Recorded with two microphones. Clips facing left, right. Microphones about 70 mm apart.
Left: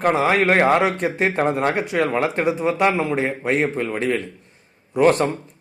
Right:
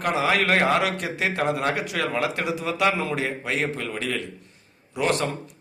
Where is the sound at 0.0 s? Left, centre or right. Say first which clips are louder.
Left 5 dB; left.